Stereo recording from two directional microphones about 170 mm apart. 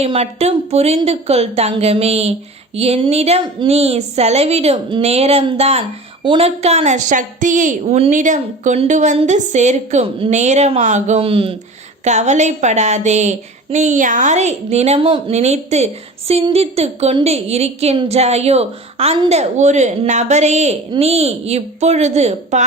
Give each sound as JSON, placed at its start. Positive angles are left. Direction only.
{"t": 0.0, "sound": "a woman's voice", "side_deg": -35}
{"t": 12.0, "sound": "a woman's voice", "side_deg": -45}